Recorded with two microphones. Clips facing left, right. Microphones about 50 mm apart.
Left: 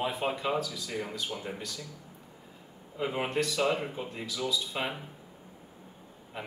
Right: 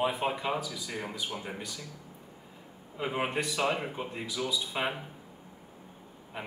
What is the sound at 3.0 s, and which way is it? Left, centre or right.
A man's voice, centre.